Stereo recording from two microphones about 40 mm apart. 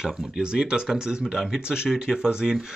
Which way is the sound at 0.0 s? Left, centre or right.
Centre.